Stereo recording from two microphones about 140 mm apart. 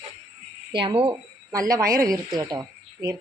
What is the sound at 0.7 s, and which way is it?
Speech, 35° right (ahead or behind).